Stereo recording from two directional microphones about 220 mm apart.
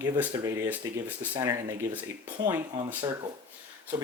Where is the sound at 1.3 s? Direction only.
15° right (ahead or behind).